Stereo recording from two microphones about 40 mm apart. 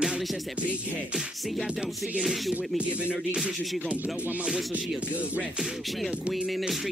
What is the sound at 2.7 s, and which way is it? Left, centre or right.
Rapping, right.